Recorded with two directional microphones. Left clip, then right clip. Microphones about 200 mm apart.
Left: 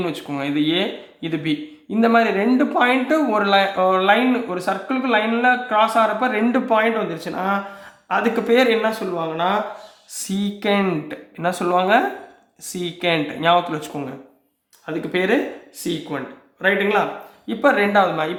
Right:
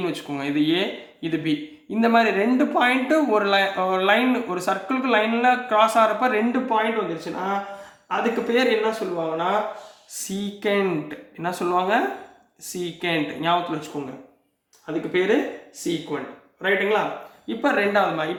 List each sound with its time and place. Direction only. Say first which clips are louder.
0.0 s speech: left 2 dB; 20° left (ahead or behind)
6.5 s speech: left 4 dB; 30° left (ahead or behind)
10.2 s speech: left 3 dB; 30° left (ahead or behind)